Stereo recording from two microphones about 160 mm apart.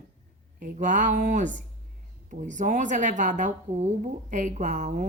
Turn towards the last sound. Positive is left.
turn(degrees=-50)  # may be behind; listen again after turning